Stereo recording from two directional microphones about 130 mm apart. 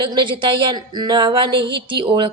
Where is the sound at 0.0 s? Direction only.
35° right (ahead or behind).